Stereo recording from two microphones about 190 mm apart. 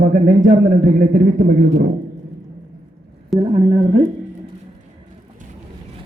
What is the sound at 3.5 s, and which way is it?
Speech, 35° right (ahead or behind).